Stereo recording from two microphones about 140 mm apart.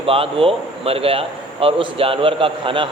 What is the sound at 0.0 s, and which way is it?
A man's voice, 40° right (ahead or behind).